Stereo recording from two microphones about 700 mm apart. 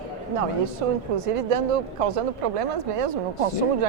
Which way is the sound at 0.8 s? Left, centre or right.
Right.